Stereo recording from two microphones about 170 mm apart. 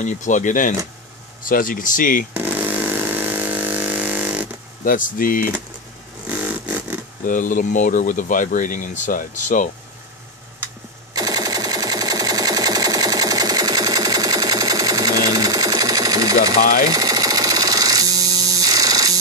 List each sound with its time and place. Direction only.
0.0 s speech: 50° left (ahead or behind)
2.3 s chainsaw: 10° right (ahead or behind)
4.8 s speech: 55° left (ahead or behind)
6.2 s vehicle: 10° right (ahead or behind)
7.2 s speech: 50° left (ahead or behind)
11.1 s a sound: 20° right (ahead or behind)